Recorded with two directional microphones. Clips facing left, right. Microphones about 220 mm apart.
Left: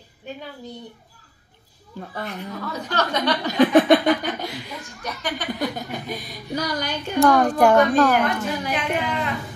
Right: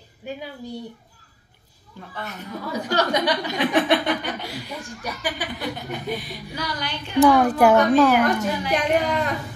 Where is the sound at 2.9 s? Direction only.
10° right (ahead or behind).